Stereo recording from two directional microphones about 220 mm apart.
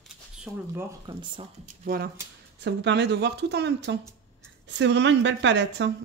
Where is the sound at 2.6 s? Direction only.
50° right (ahead or behind).